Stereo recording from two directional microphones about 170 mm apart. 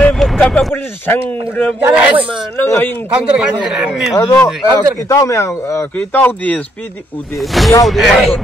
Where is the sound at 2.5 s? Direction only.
10° left (ahead or behind).